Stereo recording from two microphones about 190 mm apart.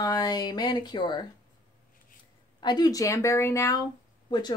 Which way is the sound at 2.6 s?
20° left (ahead or behind).